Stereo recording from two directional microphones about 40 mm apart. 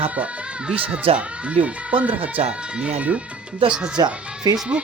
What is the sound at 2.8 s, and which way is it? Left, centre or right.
Speech, right.